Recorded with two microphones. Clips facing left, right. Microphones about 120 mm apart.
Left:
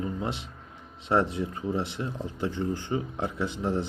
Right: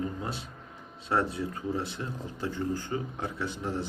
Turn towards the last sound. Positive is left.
turn(degrees=25)  # may be behind; listen again after turning